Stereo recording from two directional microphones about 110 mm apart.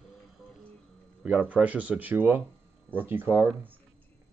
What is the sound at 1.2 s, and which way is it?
Speech, 10° right (ahead or behind).